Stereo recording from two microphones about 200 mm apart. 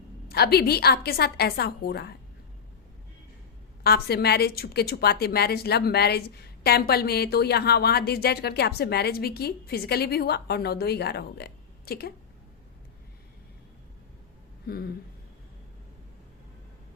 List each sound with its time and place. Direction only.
0.3 s a woman's voice: 50° left (ahead or behind)
3.8 s a woman's voice: 50° left (ahead or behind)
14.7 s a woman's voice: 50° left (ahead or behind)